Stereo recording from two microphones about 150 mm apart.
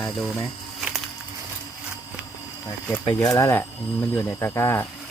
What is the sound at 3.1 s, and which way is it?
Speech, 20° left (ahead or behind).